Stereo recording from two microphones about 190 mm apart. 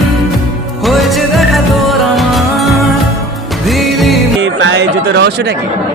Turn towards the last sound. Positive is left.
turn(degrees=-65)  # may be behind; listen again after turning